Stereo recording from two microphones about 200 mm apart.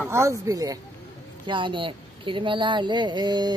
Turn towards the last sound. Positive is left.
turn(degrees=-20)  # may be behind; listen again after turning